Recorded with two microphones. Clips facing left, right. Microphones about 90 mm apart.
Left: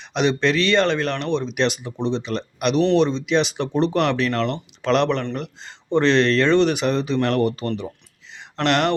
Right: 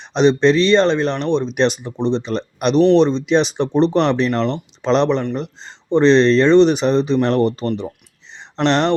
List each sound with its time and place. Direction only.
0.0 s speech: 30° right (ahead or behind)
2.7 s speech: centre (ahead or behind)
3.0 s speech: 35° right (ahead or behind)
8.4 s a sound: 25° right (ahead or behind)